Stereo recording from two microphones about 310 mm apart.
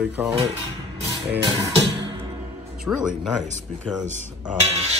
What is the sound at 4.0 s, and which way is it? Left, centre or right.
Cutlery, right.